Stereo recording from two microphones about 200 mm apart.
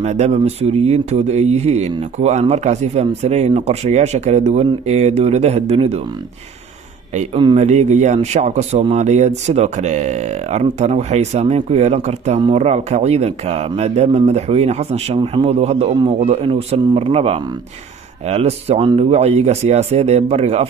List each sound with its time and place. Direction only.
0.0 s speech: 35° right (ahead or behind)
7.2 s speech: 30° right (ahead or behind)